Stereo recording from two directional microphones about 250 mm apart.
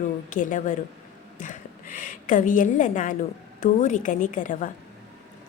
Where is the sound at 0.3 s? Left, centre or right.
Left.